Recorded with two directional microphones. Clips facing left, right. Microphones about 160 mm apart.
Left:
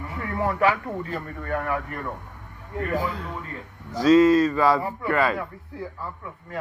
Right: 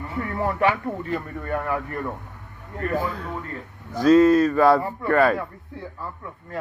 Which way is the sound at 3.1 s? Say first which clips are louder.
Right 2 dB; 45° right (ahead or behind).